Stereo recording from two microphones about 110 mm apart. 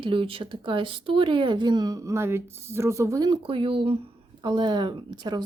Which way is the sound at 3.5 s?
55° right (ahead or behind).